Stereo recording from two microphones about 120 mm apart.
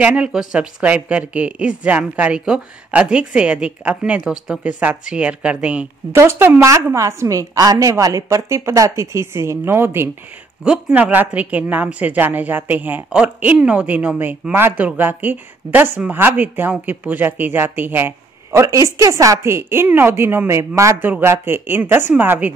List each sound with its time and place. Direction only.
0.0 s a woman's voice: 10° right (ahead or behind)
6.1 s a woman's voice: 20° right (ahead or behind)